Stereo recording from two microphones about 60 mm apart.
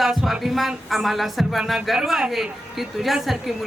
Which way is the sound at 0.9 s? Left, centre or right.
Centre.